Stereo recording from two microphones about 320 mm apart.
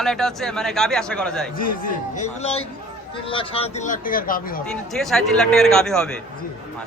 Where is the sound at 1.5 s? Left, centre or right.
Left.